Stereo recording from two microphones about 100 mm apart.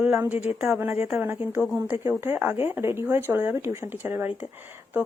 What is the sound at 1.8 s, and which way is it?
Speech, 30° right (ahead or behind).